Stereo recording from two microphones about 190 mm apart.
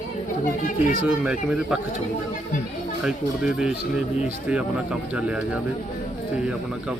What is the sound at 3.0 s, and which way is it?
Mantra, 5° right (ahead or behind).